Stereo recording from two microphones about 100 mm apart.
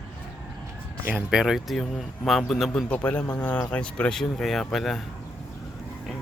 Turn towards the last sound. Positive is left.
turn(degrees=5)  # may be behind; listen again after turning